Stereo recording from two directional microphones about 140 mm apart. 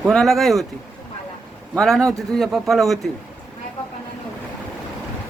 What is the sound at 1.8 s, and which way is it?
A man's voice, 5° left (ahead or behind).